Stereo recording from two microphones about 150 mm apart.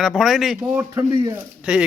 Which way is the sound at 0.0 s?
Centre (ahead or behind).